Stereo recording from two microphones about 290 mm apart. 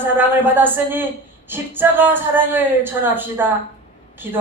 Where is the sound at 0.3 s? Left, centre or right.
Centre.